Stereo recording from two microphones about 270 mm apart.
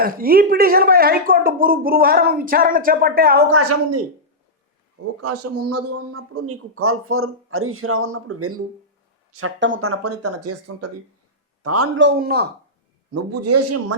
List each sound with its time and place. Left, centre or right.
0.0 s speech: right
3.5 s speech: right
5.2 s a man's voice: right
11.9 s speech: right
13.4 s speech: right